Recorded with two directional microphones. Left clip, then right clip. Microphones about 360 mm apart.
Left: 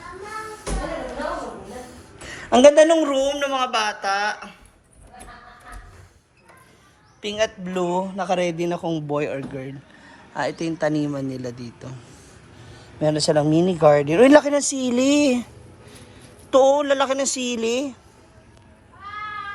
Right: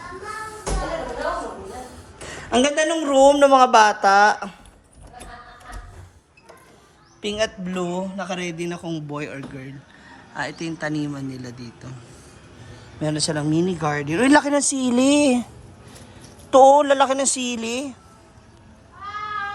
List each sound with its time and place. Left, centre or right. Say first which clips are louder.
1.7 s a sound: right 1 dB; centre
3.0 s speech: right 7 dB; centre
7.2 s speech: left 1 dB; centre
16.5 s speech: right 4 dB; centre